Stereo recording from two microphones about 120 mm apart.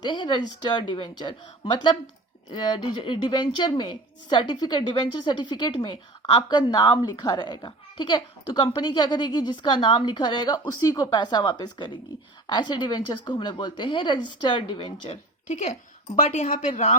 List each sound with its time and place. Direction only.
0.0 s a woman's voice: 40° left (ahead or behind)
2.5 s a woman's voice: 40° left (ahead or behind)
15.4 s speech: 85° left
16.3 s speech: 75° left (ahead or behind)